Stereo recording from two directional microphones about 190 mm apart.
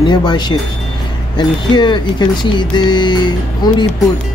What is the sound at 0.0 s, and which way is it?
Speech, 25° left (ahead or behind).